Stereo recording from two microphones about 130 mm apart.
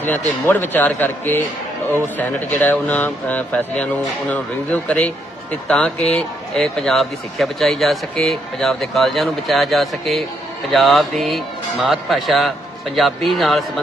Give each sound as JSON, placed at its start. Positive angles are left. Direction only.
{"t": 0.4, "sound": "a man's voice", "side_deg": 15}